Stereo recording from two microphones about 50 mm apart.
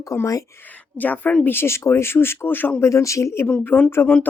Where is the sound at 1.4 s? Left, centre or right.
Left.